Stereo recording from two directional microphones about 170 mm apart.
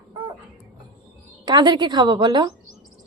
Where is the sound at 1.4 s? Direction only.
25° right (ahead or behind).